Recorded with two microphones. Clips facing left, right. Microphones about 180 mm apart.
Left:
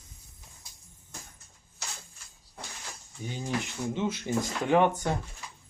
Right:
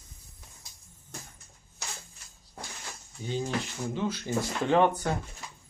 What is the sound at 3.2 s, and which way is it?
Speech, 15° left (ahead or behind).